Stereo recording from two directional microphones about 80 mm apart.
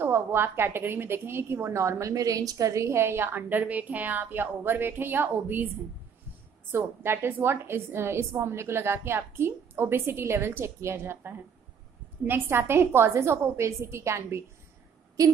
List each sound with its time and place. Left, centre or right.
0.0 s a woman's voice: right
6.7 s a woman's voice: right